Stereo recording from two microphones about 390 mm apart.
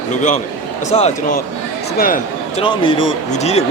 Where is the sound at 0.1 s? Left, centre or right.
Centre.